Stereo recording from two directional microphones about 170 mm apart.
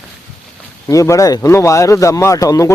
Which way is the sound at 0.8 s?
20° left (ahead or behind).